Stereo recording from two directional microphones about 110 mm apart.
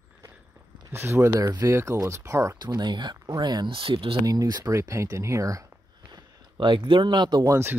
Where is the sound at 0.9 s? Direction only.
25° right (ahead or behind).